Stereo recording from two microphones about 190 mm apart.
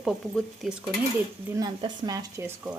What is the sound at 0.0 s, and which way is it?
Speech, centre (ahead or behind).